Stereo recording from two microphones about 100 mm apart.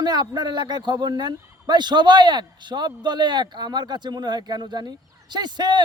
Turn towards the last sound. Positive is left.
turn(degrees=-45)  # may be behind; listen again after turning